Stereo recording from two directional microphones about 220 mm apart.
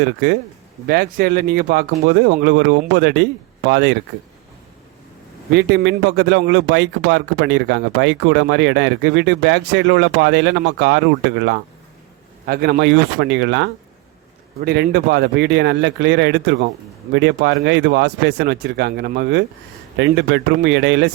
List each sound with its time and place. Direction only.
0.0 s a man's voice: 55° right (ahead or behind)
5.5 s a man's voice: 50° right (ahead or behind)